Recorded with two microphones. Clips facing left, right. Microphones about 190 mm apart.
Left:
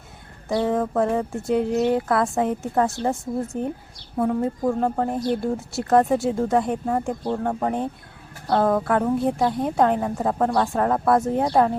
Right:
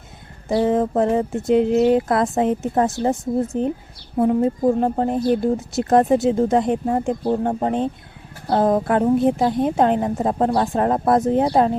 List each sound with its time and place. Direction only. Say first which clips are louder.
0.4 s speech: right 4 dB; 20° right (ahead or behind)